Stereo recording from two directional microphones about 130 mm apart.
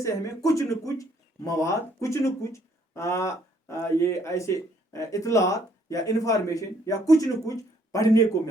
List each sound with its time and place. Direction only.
0.0 s speech: 25° left (ahead or behind)